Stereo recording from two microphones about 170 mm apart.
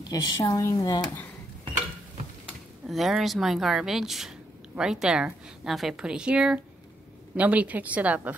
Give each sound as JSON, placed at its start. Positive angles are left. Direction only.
{"t": 0.0, "sound": "speech", "side_deg": 25}
{"t": 2.9, "sound": "a woman's voice", "side_deg": 0}